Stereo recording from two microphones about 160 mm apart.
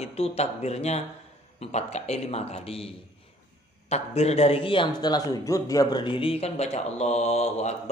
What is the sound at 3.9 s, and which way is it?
A man's voice, 40° left (ahead or behind).